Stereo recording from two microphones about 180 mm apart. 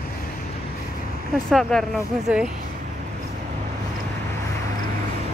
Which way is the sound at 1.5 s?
Centre (ahead or behind).